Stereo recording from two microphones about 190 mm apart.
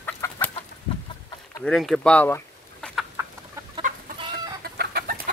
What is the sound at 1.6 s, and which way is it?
Speech, centre (ahead or behind).